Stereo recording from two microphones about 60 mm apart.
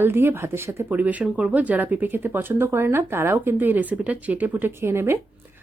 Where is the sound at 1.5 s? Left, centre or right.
Right.